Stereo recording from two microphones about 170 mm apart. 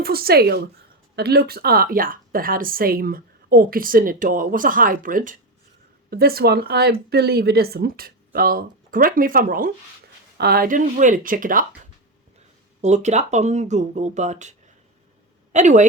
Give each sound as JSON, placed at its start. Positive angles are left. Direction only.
{"t": 0.0, "sound": "speech", "side_deg": -65}
{"t": 6.1, "sound": "speech", "side_deg": -65}
{"t": 10.3, "sound": "speech", "side_deg": -70}
{"t": 12.8, "sound": "speech", "side_deg": -45}
{"t": 15.5, "sound": "speech", "side_deg": -45}